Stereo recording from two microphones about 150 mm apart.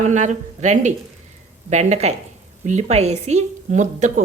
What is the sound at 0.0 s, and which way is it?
A woman's voice, 55° right (ahead or behind).